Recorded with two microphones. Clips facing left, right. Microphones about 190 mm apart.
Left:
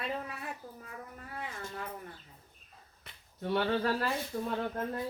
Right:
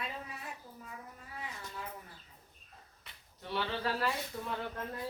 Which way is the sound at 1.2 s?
55° left (ahead or behind).